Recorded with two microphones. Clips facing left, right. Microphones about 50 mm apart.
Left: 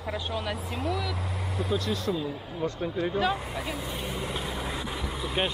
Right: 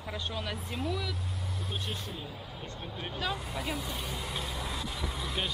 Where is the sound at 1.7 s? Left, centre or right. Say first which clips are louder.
Left 10 dB; left.